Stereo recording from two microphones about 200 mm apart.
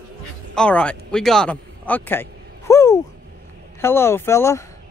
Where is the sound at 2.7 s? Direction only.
15° left (ahead or behind).